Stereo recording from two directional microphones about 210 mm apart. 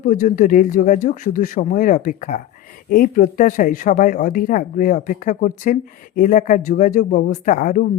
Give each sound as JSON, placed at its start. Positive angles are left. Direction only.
{"t": 0.0, "sound": "speech", "side_deg": 40}